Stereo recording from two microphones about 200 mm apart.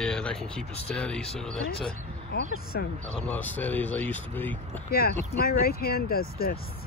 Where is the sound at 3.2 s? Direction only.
10° left (ahead or behind).